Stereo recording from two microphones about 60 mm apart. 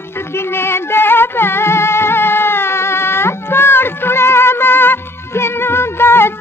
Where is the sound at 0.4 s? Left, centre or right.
Left.